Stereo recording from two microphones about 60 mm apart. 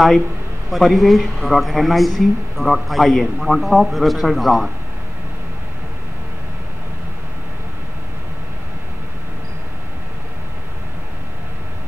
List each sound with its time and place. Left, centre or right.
0.7 s speech: centre